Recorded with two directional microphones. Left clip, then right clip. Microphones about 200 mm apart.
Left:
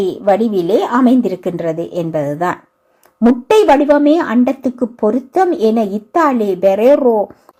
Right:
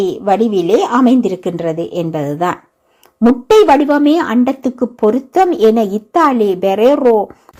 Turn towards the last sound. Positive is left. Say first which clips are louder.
# right 2 dB
turn(degrees=-20)  # may be behind; listen again after turning